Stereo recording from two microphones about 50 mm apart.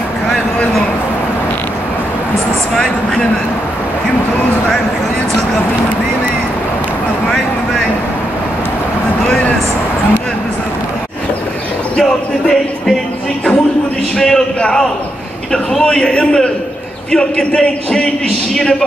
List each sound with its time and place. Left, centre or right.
12.0 s speech: centre
14.1 s a man's voice: centre